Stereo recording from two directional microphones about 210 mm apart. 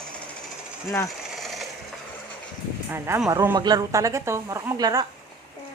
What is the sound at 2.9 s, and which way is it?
Speech, 10° right (ahead or behind).